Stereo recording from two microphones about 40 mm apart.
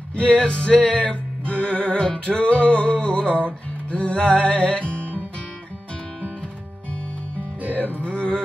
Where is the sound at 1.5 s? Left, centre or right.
Right.